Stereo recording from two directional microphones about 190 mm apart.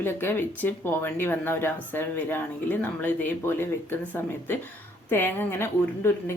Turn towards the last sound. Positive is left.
turn(degrees=10)  # may be behind; listen again after turning